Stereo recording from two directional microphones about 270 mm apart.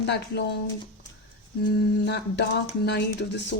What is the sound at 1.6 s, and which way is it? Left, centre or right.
A woman's voice, left.